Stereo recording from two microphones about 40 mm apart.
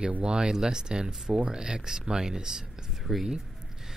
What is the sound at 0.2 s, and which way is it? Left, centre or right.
Speech, right.